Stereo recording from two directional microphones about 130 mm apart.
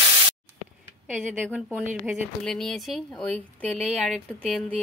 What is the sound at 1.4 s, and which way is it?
Speech, 5° left (ahead or behind).